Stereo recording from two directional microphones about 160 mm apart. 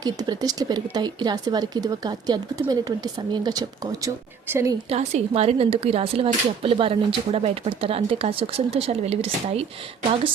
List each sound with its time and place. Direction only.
0.0 s speech: 25° right (ahead or behind)
4.9 s speech: 40° right (ahead or behind)